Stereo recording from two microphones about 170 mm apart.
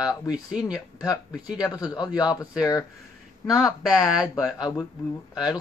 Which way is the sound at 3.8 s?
Centre (ahead or behind).